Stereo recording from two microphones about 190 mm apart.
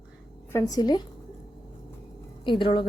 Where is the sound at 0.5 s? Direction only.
20° left (ahead or behind).